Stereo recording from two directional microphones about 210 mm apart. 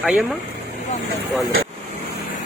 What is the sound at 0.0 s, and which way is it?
Speech, 5° right (ahead or behind).